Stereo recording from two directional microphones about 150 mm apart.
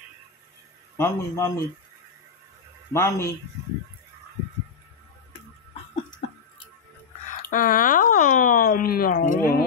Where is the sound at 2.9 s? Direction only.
20° left (ahead or behind).